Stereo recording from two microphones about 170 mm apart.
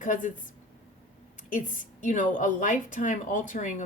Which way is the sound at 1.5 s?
50° left (ahead or behind).